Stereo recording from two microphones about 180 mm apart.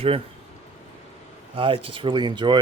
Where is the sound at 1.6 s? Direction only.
30° right (ahead or behind).